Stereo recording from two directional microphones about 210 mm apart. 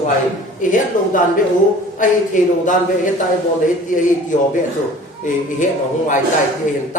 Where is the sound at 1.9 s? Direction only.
35° left (ahead or behind).